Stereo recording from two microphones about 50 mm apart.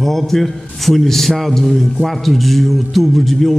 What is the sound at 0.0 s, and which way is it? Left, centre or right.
A man's voice, centre.